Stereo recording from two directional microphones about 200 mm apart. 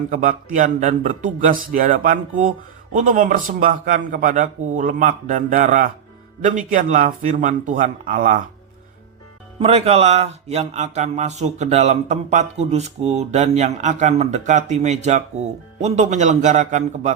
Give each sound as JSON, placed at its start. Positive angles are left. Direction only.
{"t": 0.1, "sound": "speech", "side_deg": -40}
{"t": 9.6, "sound": "speech", "side_deg": -30}